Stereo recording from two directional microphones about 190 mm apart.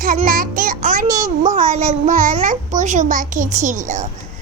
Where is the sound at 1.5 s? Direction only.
40° right (ahead or behind).